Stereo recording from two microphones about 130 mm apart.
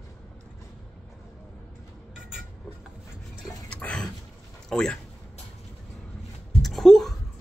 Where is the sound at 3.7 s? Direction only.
10° left (ahead or behind).